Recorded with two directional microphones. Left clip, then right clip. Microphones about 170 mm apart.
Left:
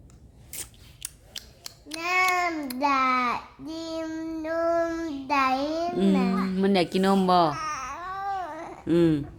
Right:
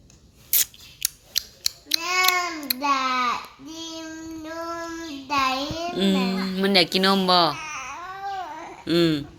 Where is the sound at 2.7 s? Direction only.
30° left (ahead or behind).